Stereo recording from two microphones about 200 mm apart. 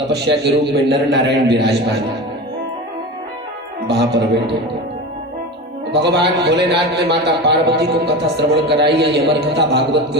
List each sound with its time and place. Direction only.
0.1 s a man's voice: 55° right (ahead or behind)
3.8 s a man's voice: 55° right (ahead or behind)
5.9 s a man's voice: 55° right (ahead or behind)